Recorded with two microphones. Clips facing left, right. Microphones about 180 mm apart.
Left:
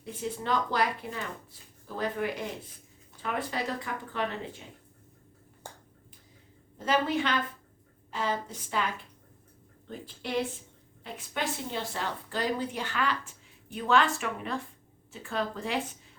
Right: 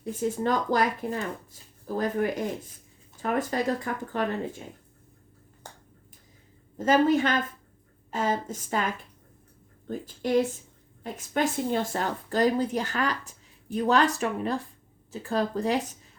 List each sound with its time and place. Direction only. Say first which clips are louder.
0.0 s a woman's voice: right 8 dB; 45° right (ahead or behind)
6.7 s a woman's voice: right 6 dB; 45° right (ahead or behind)